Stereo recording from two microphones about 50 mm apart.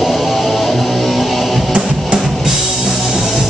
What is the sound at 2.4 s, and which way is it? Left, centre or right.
Music, centre.